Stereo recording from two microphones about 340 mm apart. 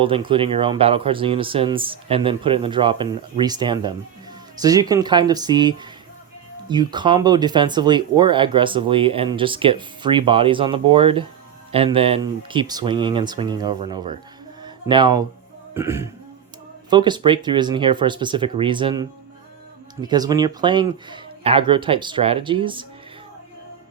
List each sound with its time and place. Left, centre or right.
0.0 s speech: centre
14.6 s a sound: centre
15.7 s speech: centre